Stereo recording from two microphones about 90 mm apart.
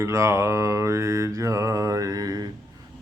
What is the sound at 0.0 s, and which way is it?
Mantra, 30° right (ahead or behind).